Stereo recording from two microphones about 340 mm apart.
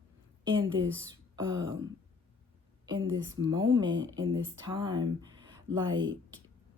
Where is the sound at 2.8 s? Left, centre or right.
Centre.